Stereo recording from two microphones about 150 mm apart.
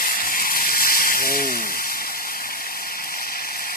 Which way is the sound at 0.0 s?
70° left (ahead or behind).